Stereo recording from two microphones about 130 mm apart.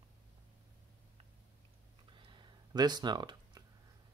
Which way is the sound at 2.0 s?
40° right (ahead or behind).